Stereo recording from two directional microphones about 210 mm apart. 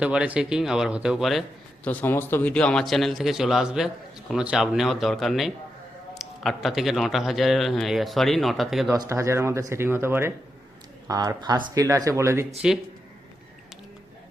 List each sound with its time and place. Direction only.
0.0 s a man's voice: 5° right (ahead or behind)
9.0 s speech: 15° right (ahead or behind)